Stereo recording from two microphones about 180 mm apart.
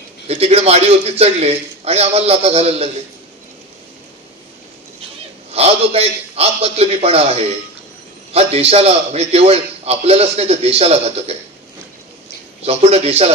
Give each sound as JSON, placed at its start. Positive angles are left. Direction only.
{"t": 0.3, "sound": "a man's voice", "side_deg": -35}
{"t": 5.5, "sound": "a man's voice", "side_deg": -35}
{"t": 12.6, "sound": "a man's voice", "side_deg": -35}